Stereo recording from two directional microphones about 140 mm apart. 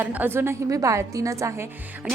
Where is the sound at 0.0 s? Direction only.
15° right (ahead or behind).